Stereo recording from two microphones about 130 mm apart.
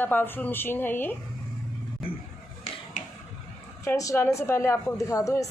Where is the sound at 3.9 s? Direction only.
25° left (ahead or behind).